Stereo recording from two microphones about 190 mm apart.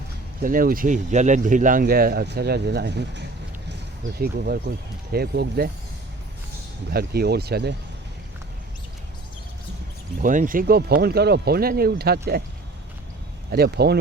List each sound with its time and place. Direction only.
0.4 s speech: 45° right (ahead or behind)
4.2 s speech: 55° right (ahead or behind)
6.9 s speech: 55° right (ahead or behind)
10.2 s speech: 45° right (ahead or behind)
13.5 s speech: 55° right (ahead or behind)